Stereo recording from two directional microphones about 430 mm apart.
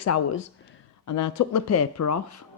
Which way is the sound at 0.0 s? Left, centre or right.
Left.